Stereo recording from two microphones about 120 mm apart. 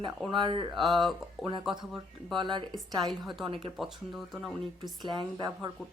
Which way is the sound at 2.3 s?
40° right (ahead or behind).